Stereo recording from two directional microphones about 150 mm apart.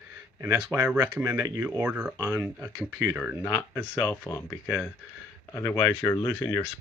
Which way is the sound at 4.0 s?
15° left (ahead or behind).